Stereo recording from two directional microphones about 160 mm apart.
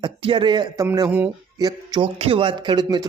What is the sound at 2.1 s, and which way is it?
Speech, 35° right (ahead or behind).